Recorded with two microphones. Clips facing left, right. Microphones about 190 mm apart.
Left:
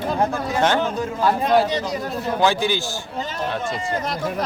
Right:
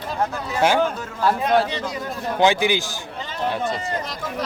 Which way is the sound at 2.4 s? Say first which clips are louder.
Right 3 dB; 15° right (ahead or behind).